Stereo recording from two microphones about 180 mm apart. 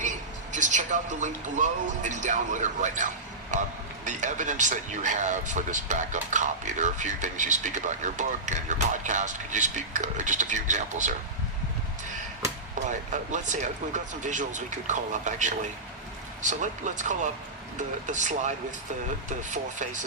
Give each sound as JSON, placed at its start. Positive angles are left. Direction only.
{"t": 0.5, "sound": "speech", "side_deg": -45}
{"t": 13.3, "sound": "speech", "side_deg": -45}